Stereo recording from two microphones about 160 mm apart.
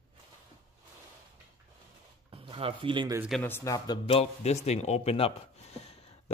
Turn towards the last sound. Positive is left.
turn(degrees=40)  # may be behind; listen again after turning